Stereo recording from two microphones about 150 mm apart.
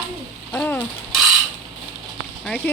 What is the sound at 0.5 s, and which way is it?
Speech, 10° left (ahead or behind).